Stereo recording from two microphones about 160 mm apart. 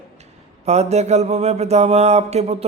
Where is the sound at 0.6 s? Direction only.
45° right (ahead or behind).